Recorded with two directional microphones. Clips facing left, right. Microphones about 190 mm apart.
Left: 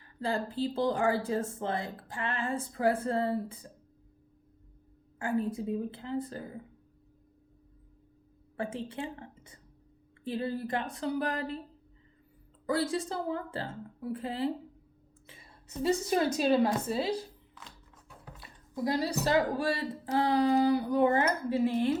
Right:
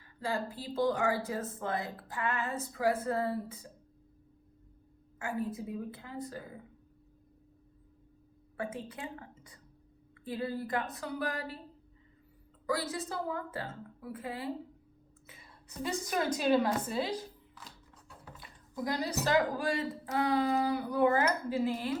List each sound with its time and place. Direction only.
0.7 s a woman's voice: 30° left (ahead or behind)
5.2 s a woman's voice: 30° left (ahead or behind)
8.5 s a woman's voice: 30° left (ahead or behind)
12.7 s a woman's voice: 30° left (ahead or behind)
18.7 s a woman's voice: 30° left (ahead or behind)